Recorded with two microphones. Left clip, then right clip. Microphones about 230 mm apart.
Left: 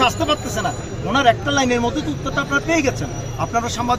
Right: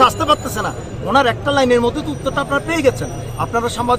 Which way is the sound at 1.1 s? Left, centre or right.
Centre.